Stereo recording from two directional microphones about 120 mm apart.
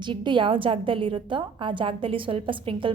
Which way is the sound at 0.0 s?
40° right (ahead or behind).